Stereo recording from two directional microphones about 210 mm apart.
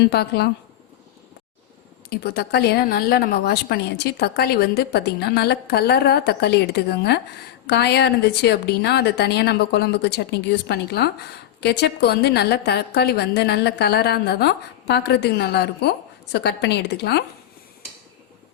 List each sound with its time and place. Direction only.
0.0 s a woman's voice: 50° left (ahead or behind)
2.0 s a woman's voice: 50° left (ahead or behind)